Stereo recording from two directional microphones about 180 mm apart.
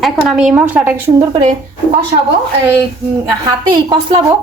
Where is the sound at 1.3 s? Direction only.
30° right (ahead or behind).